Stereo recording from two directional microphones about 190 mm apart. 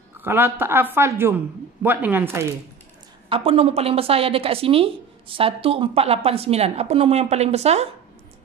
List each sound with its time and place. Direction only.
0.2 s a woman's voice: 10° right (ahead or behind)
3.3 s a woman's voice: 30° right (ahead or behind)